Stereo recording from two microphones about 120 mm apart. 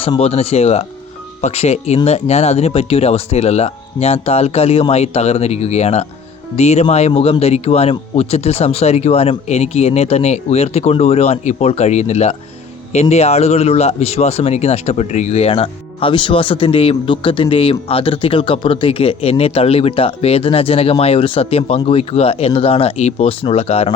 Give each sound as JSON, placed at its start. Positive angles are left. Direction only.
{"t": 0.2, "sound": "speech", "side_deg": 60}